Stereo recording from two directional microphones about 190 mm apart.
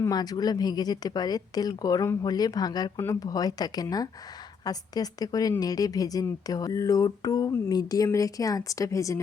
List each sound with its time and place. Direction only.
0.0 s a woman's voice: 20° left (ahead or behind)